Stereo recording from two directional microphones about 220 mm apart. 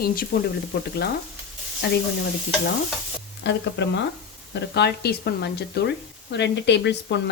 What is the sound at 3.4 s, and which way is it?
A woman's voice, 55° left (ahead or behind).